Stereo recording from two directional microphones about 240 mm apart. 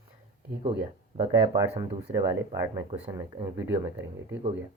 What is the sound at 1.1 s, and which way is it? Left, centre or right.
Speech, right.